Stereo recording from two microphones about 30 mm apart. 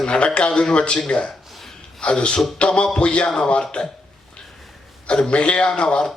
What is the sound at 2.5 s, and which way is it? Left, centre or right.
Speech, left.